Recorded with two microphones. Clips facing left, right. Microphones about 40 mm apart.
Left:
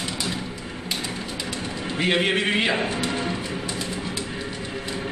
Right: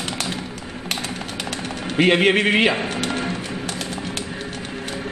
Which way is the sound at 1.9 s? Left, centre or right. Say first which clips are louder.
Right 6 dB; right.